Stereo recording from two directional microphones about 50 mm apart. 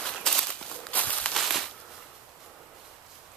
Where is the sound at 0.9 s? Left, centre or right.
Left.